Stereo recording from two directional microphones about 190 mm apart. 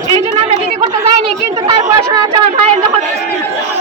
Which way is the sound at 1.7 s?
25° right (ahead or behind).